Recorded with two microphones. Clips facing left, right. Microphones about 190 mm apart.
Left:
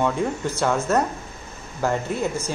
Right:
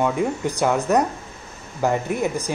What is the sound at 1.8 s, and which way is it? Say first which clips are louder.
Speech: right 2 dB; 15° right (ahead or behind).